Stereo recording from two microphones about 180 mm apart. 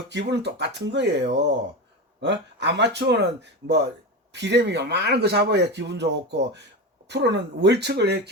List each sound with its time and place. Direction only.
0.1 s speech: 75° right (ahead or behind)
4.3 s speech: 70° right (ahead or behind)